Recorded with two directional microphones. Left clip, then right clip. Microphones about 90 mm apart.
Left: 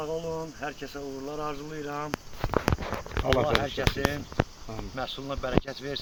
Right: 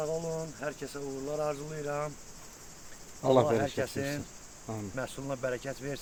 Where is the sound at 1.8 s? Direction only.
50° right (ahead or behind).